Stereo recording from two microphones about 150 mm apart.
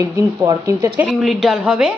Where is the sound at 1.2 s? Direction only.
Centre (ahead or behind).